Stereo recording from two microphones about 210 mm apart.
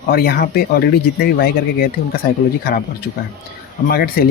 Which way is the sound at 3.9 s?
45° left (ahead or behind).